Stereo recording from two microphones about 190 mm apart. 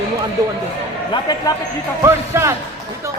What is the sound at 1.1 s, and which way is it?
Speech, 20° left (ahead or behind).